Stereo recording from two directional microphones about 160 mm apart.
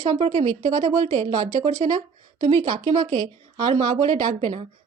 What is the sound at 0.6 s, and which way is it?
Speech, 50° right (ahead or behind).